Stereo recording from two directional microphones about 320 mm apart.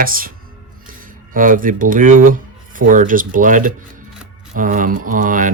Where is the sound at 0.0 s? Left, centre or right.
Right.